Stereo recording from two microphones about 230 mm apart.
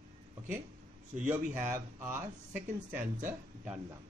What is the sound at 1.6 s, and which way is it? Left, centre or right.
Speech, centre.